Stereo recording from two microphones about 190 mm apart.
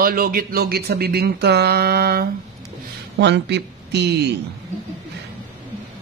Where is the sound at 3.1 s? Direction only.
65° right (ahead or behind).